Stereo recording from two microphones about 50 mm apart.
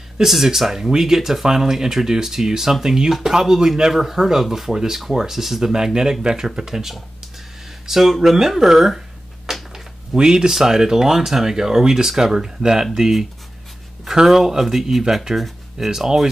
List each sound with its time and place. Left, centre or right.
0.2 s speech: centre
9.5 s a sound: centre
10.1 s speech: centre